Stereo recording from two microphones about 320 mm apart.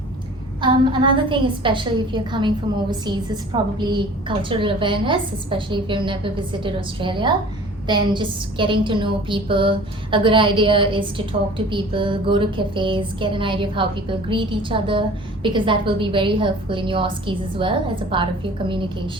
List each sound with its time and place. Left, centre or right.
0.6 s a woman's voice: centre